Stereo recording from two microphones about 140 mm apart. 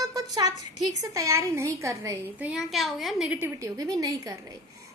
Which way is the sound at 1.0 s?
25° right (ahead or behind).